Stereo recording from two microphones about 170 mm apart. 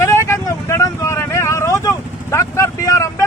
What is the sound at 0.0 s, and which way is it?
Vehicle, 15° left (ahead or behind).